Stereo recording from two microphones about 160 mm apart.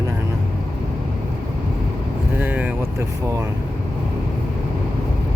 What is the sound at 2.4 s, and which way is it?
Speech, 10° right (ahead or behind).